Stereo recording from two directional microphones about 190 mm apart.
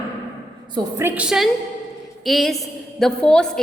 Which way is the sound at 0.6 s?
25° right (ahead or behind).